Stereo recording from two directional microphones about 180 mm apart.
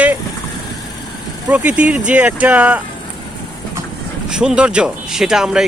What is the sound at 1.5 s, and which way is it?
Speech, 5° right (ahead or behind).